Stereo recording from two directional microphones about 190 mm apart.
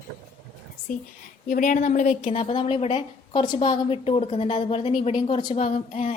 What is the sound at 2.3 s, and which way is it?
A woman's voice, 30° left (ahead or behind).